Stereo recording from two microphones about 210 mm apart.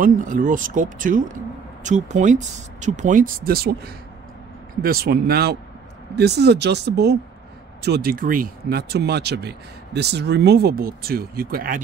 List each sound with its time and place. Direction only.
0.0 s speech: 40° right (ahead or behind)